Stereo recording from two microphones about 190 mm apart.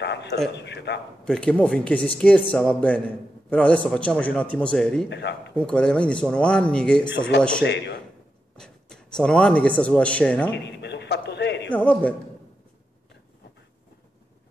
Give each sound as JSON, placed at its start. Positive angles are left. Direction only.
{"t": 0.0, "sound": "a sound", "side_deg": 65}
{"t": 0.6, "sound": "a man's voice", "side_deg": 65}
{"t": 1.2, "sound": "a man's voice", "side_deg": 5}
{"t": 7.2, "sound": "a man's voice", "side_deg": 65}
{"t": 8.5, "sound": "speech", "side_deg": 5}
{"t": 10.5, "sound": "a sound", "side_deg": 65}
{"t": 11.7, "sound": "a man's voice", "side_deg": 10}